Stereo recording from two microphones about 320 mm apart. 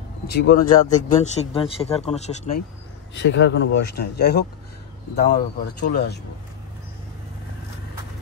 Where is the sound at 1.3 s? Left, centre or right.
Centre.